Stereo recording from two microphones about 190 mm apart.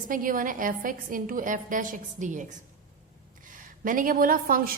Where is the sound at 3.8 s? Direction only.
45° right (ahead or behind).